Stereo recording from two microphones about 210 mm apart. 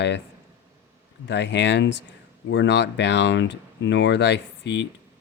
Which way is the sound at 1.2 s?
55° left (ahead or behind).